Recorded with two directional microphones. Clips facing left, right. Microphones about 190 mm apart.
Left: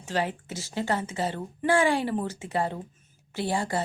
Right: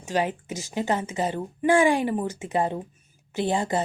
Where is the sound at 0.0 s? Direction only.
15° right (ahead or behind).